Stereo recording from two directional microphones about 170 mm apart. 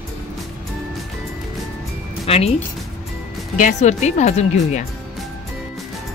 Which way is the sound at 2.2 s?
40° left (ahead or behind).